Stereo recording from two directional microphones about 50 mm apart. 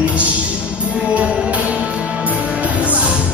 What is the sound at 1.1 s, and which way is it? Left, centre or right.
Music, right.